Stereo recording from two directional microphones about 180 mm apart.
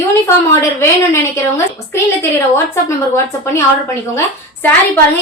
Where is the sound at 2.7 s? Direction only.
15° left (ahead or behind).